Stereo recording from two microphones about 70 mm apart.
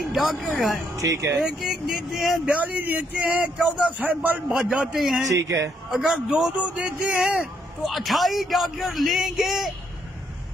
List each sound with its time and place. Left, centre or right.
0.1 s a man's voice: centre
0.9 s speech: right
1.4 s a man's voice: centre
2.4 s speech: right
4.5 s a man's voice: centre
5.2 s speech: right
5.9 s a man's voice: centre
7.8 s a man's voice: centre